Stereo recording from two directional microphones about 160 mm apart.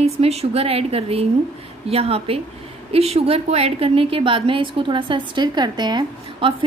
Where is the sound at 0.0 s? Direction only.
40° right (ahead or behind).